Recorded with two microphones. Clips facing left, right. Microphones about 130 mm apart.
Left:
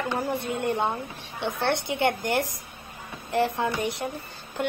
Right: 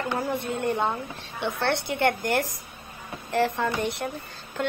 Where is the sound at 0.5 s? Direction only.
15° left (ahead or behind).